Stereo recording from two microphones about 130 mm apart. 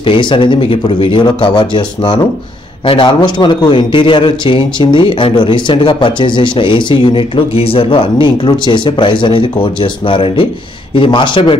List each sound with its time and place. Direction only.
0.0 s a man's voice: 40° left (ahead or behind)